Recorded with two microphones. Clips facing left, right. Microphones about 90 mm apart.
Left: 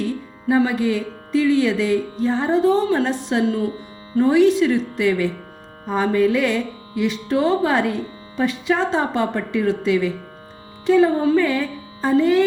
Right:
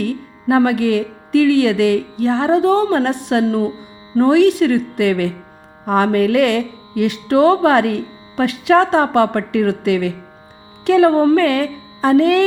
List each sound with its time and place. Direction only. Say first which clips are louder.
0.0 s speech: right 3 dB; 60° right (ahead or behind)